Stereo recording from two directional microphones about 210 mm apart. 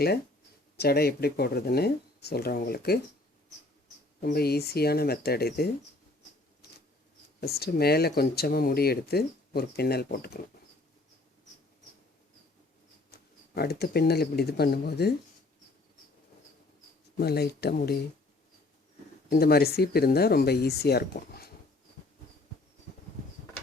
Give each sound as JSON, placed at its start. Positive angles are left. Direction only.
{"t": 0.8, "sound": "speech", "side_deg": 50}
{"t": 4.2, "sound": "speech", "side_deg": 50}
{"t": 7.4, "sound": "speech", "side_deg": 50}
{"t": 13.1, "sound": "speech", "side_deg": 50}
{"t": 17.2, "sound": "speech", "side_deg": 50}
{"t": 19.3, "sound": "speech", "side_deg": 45}